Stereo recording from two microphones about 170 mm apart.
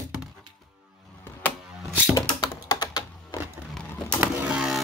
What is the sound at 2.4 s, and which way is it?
Typing, 25° left (ahead or behind).